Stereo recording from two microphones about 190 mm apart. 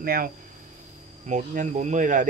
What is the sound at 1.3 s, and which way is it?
Speech, 40° right (ahead or behind).